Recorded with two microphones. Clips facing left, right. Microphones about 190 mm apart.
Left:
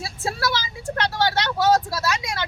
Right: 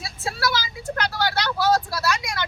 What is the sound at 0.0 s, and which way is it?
Vehicle, 30° left (ahead or behind).